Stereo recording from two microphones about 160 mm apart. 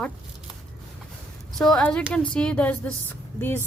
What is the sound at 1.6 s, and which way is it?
A woman's voice, 5° left (ahead or behind).